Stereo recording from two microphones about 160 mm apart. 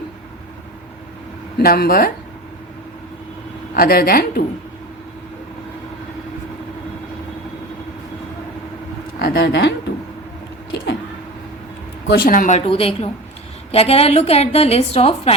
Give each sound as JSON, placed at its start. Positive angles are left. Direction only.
{"t": 1.5, "sound": "a woman's voice", "side_deg": 70}
{"t": 3.8, "sound": "a woman's voice", "side_deg": 65}
{"t": 9.1, "sound": "speech", "side_deg": 70}
{"t": 12.0, "sound": "a woman's voice", "side_deg": 70}